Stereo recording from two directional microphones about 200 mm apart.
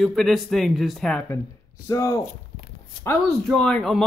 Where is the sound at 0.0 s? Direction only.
Centre (ahead or behind).